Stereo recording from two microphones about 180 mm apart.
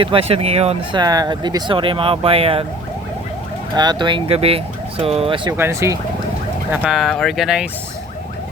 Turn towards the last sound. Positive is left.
turn(degrees=-5)  # may be behind; listen again after turning